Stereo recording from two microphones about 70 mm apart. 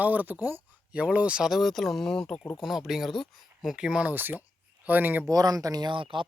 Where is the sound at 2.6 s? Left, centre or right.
Centre.